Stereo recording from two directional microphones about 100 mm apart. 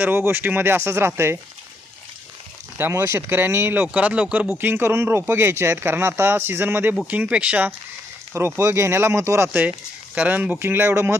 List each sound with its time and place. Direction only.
0.0 s speech: 20° right (ahead or behind)
2.7 s speech: 25° right (ahead or behind)
8.3 s speech: 25° right (ahead or behind)